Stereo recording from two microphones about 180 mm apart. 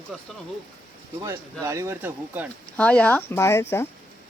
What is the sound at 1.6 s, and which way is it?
Speech, 15° right (ahead or behind).